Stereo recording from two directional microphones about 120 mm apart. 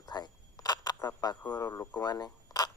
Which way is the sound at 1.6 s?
20° left (ahead or behind).